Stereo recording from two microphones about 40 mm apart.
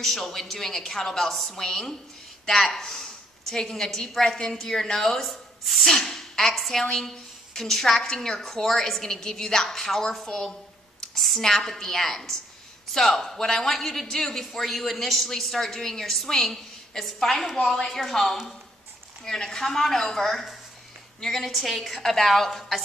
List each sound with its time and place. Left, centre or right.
0.0 s a woman's voice: centre
17.6 s a woman's voice: centre